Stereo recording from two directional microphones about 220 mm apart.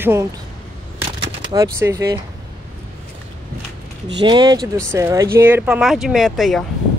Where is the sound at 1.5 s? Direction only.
15° right (ahead or behind).